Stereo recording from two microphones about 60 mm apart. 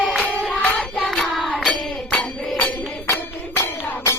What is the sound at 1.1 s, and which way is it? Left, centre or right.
Hands, centre.